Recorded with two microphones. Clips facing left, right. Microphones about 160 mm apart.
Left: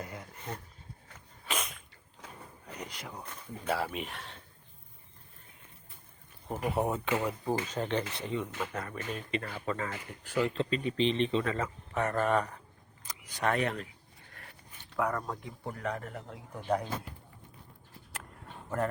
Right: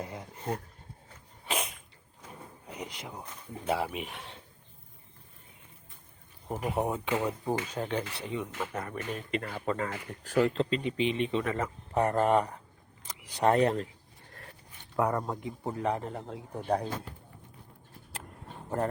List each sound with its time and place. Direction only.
0.5 s speech: 50° right (ahead or behind)
2.6 s a sound: 10° right (ahead or behind)
2.9 s speech: 20° right (ahead or behind)
3.9 s speech: 5° right (ahead or behind)
6.5 s speech: 15° right (ahead or behind)
8.7 s speech: 25° right (ahead or behind)
9.3 s speech: 40° right (ahead or behind)
10.8 s speech: 10° right (ahead or behind); by 13.9 s 30° right (ahead or behind)
14.9 s speech: 25° right (ahead or behind)
18.1 s a sound: 30° right (ahead or behind)